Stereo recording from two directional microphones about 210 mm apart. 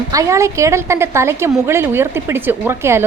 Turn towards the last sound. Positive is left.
turn(degrees=-10)  # may be behind; listen again after turning